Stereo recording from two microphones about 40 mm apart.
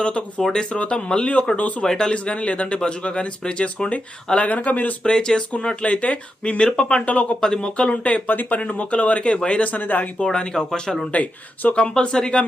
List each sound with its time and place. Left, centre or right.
0.0 s speech: left
1.5 s speech: left
1.8 s speech: centre
2.1 s speech: left
5.0 s speech: centre
5.8 s speech: left; by 6.9 s centre
6.9 s speech: left
7.4 s speech: centre
7.8 s speech: left
8.3 s speech: left
8.6 s speech: left
10.3 s speech: left
11.1 s speech: left
11.9 s speech: centre